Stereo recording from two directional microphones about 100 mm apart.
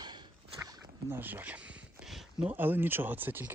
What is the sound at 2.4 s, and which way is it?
Speech, 20° right (ahead or behind).